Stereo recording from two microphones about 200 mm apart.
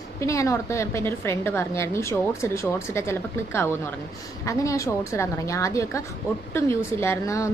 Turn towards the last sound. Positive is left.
turn(degrees=15)  # may be behind; listen again after turning